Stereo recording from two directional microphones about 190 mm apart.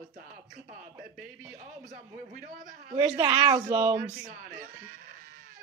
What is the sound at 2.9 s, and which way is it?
Speech, 25° right (ahead or behind).